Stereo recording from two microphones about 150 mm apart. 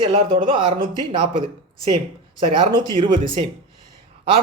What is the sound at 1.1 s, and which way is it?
Speech, 35° right (ahead or behind).